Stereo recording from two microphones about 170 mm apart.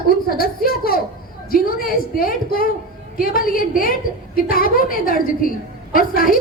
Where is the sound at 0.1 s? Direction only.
60° left (ahead or behind).